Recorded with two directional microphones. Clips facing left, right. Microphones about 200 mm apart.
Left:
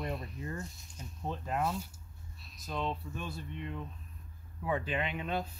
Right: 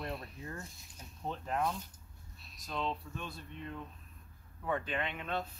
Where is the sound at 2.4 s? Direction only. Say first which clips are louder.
Left 1 dB; 5° left (ahead or behind).